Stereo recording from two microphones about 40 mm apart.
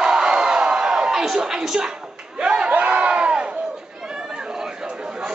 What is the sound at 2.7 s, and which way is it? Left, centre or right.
Crowd, right.